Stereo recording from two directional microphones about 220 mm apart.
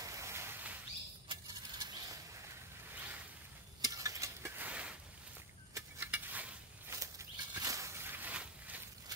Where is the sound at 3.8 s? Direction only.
15° right (ahead or behind).